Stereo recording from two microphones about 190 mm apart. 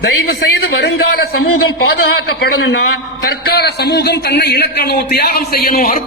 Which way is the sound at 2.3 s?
60° left (ahead or behind).